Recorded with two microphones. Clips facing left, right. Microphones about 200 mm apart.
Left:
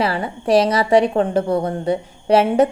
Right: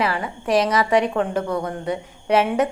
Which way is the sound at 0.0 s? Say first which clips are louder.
Left 3 dB; 30° left (ahead or behind).